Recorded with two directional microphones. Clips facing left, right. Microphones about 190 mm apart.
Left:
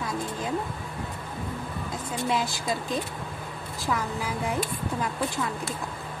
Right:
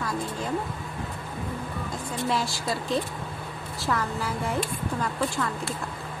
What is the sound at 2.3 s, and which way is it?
Speech, 20° left (ahead or behind).